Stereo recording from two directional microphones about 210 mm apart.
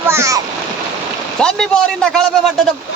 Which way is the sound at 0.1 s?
15° right (ahead or behind).